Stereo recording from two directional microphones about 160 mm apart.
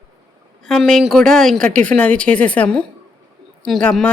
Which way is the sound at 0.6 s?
5° left (ahead or behind).